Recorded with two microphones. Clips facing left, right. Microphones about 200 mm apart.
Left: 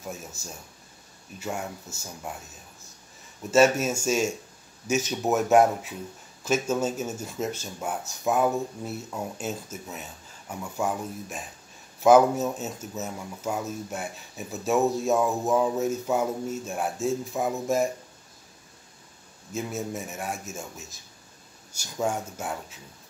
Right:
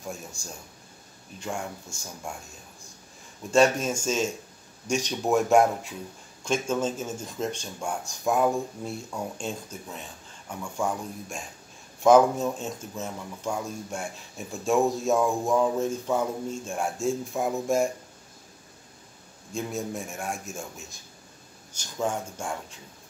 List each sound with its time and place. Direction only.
0.0 s speech: 5° left (ahead or behind)
3.5 s speech: 5° left (ahead or behind)
19.5 s speech: 5° left (ahead or behind)